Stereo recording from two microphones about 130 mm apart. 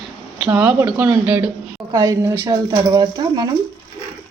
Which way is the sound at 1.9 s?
25° right (ahead or behind).